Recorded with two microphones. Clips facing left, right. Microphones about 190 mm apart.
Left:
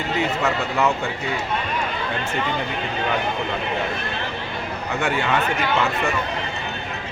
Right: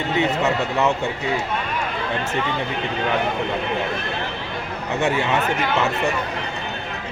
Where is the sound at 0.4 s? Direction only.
25° right (ahead or behind).